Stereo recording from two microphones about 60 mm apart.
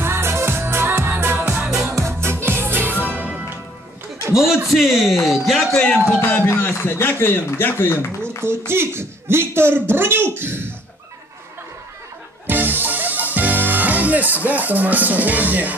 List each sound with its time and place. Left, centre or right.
0.0 s music: right
2.0 s music: right
4.7 s speech: centre
5.9 s speech: left
6.6 s speech: left
8.4 s speech: right
12.4 s music: right